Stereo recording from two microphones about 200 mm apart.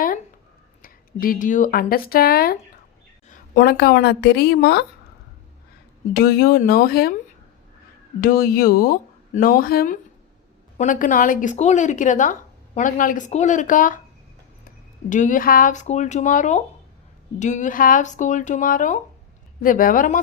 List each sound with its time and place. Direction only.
0.8 s speech: 45° left (ahead or behind)
6.1 s speech: 50° left (ahead or behind)
8.2 s speech: 45° left (ahead or behind)
15.1 s speech: 40° left (ahead or behind)